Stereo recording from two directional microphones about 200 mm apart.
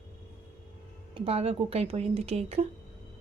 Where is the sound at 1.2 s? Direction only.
30° right (ahead or behind).